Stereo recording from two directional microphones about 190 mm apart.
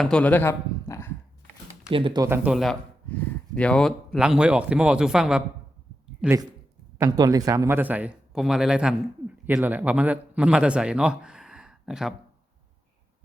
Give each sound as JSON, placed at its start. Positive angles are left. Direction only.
{"t": 0.0, "sound": "a sound", "side_deg": 5}
{"t": 1.9, "sound": "speech", "side_deg": -25}
{"t": 2.2, "sound": "speech", "side_deg": -10}
{"t": 7.0, "sound": "a man's voice", "side_deg": -20}